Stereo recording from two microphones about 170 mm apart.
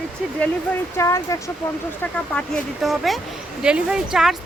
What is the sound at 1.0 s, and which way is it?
Speech, 15° left (ahead or behind).